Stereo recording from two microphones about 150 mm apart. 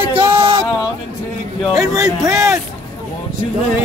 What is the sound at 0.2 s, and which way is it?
Music, 30° right (ahead or behind).